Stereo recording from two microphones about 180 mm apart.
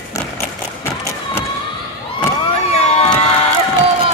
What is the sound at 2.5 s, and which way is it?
Vehicle, 35° left (ahead or behind).